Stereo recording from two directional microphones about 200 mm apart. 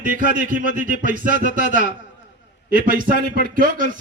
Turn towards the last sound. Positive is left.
turn(degrees=-45)  # may be behind; listen again after turning